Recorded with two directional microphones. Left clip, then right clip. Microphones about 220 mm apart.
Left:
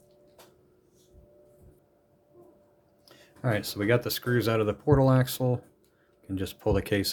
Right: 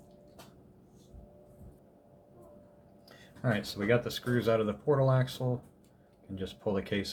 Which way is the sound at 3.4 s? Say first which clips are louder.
Left 4 dB; 50° left (ahead or behind).